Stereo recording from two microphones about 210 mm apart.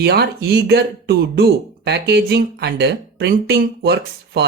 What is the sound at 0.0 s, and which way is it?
Speech, 50° right (ahead or behind).